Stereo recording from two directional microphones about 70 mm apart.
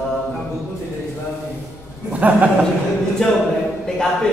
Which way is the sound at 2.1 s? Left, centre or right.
Right.